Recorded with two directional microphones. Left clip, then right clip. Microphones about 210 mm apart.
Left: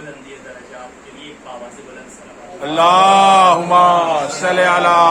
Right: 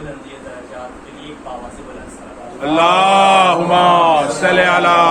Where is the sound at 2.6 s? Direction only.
25° left (ahead or behind).